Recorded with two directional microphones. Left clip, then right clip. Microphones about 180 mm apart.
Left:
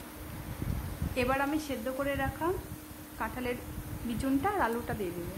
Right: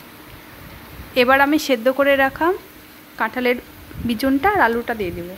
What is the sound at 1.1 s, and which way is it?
A woman's voice, 35° right (ahead or behind).